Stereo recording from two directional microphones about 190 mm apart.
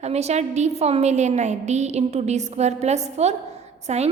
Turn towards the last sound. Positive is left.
turn(degrees=-35)  # may be behind; listen again after turning